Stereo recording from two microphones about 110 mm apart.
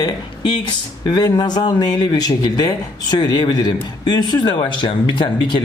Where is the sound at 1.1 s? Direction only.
40° left (ahead or behind).